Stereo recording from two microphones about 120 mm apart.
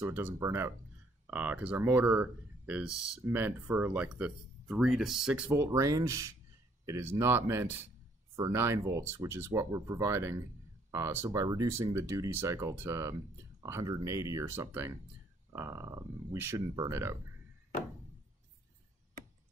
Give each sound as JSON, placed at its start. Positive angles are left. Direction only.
{"t": 0.0, "sound": "speech", "side_deg": -20}
{"t": 5.7, "sound": "speech", "side_deg": -30}